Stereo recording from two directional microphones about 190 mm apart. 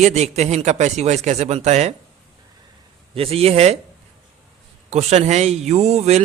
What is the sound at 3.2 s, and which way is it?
Speech, 30° right (ahead or behind).